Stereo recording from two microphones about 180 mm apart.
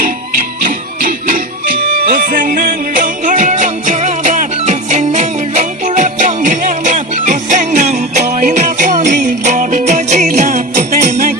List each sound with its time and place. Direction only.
0.0 s music: 50° right (ahead or behind)